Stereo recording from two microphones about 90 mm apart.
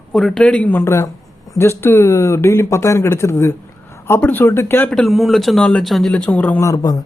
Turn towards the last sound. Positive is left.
turn(degrees=40)  # may be behind; listen again after turning